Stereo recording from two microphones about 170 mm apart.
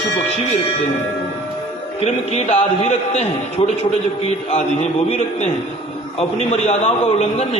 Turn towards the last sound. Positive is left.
turn(degrees=40)  # may be behind; listen again after turning